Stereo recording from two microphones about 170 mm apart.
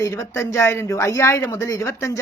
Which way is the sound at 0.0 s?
20° left (ahead or behind).